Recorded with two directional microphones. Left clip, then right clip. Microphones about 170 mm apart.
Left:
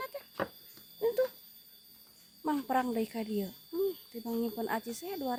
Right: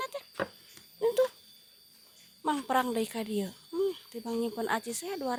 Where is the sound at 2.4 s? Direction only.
10° right (ahead or behind).